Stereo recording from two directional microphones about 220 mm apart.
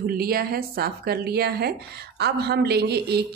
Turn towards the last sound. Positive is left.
turn(degrees=-45)  # may be behind; listen again after turning